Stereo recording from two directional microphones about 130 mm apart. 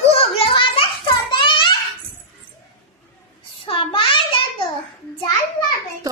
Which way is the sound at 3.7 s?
40° left (ahead or behind).